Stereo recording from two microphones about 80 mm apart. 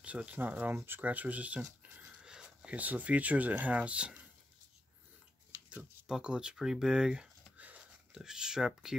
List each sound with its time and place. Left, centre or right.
0.0 s speech: centre
5.7 s a sound: centre
8.2 s speech: centre